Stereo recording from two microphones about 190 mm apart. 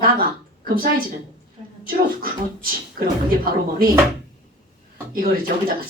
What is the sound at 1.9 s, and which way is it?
Speech, 50° right (ahead or behind).